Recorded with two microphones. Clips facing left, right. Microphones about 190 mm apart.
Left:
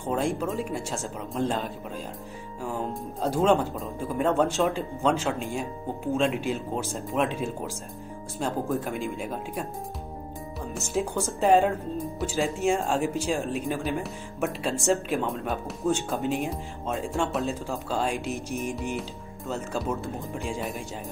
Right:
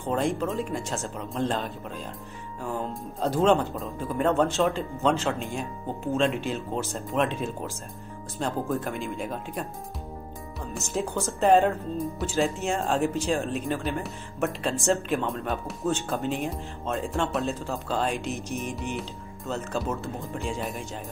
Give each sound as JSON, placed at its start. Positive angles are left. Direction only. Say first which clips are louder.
{"t": 0.0, "sound": "speech", "louder": "right 1 dB", "side_deg": 10}
{"t": 2.9, "sound": "speech", "louder": "even", "side_deg": 10}
{"t": 10.7, "sound": "speech", "louder": "left 1 dB", "side_deg": 5}
{"t": 15.9, "sound": "speech", "louder": "left 1 dB", "side_deg": 10}
{"t": 16.8, "sound": "music", "louder": "even", "side_deg": 5}
{"t": 17.6, "sound": "speech", "louder": "even", "side_deg": 10}
{"t": 20.3, "sound": "music", "louder": "right 1 dB", "side_deg": 5}